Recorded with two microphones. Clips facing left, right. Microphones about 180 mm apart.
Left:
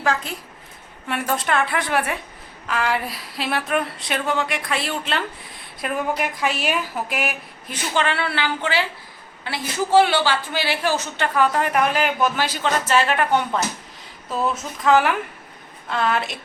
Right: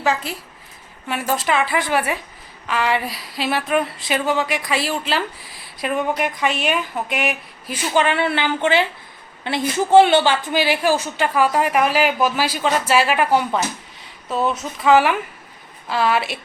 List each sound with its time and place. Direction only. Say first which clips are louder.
0.0 s speech: right 2 dB; 5° right (ahead or behind)
7.9 s a woman's voice: right 4 dB; 15° right (ahead or behind)
14.8 s speech: right 2 dB; 5° right (ahead or behind)